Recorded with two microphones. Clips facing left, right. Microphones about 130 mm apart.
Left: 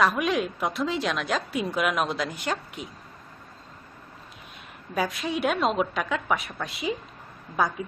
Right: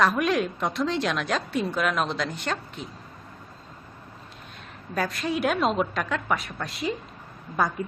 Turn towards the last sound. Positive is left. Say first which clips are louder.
# even
turn(degrees=0)  # may be behind; listen again after turning